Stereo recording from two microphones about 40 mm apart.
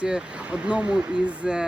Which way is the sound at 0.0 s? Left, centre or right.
Right.